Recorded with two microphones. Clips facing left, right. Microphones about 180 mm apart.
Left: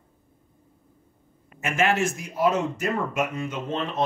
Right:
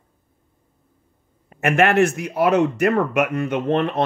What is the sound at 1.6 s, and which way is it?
Speech, 60° right (ahead or behind).